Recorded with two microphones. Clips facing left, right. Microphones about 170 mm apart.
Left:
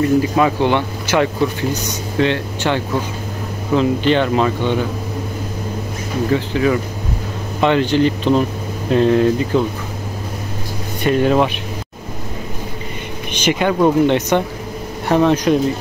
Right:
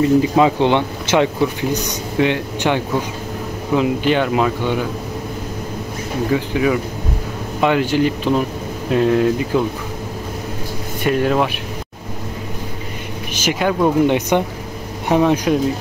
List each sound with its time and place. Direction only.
0.0 s speech: 20° right (ahead or behind)
6.3 s speech: 10° right (ahead or behind)
11.1 s speech: centre (ahead or behind)
13.3 s speech: 5° right (ahead or behind)
14.0 s speech: 10° right (ahead or behind)